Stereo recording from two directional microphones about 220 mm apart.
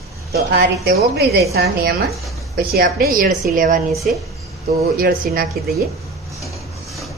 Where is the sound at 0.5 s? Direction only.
45° right (ahead or behind).